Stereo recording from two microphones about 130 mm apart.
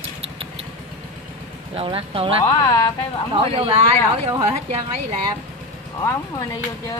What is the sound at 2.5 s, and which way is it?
Speech, 30° left (ahead or behind).